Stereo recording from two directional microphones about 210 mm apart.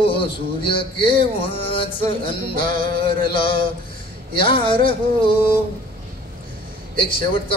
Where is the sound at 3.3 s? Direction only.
25° left (ahead or behind).